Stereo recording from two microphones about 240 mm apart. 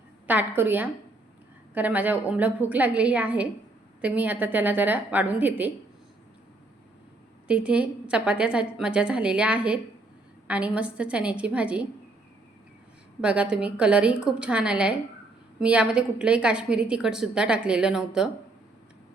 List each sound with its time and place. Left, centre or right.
0.3 s a woman's voice: centre
7.4 s a woman's voice: centre
13.2 s a woman's voice: centre